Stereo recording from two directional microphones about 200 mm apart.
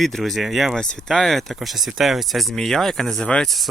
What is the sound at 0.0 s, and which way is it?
Speech, centre (ahead or behind).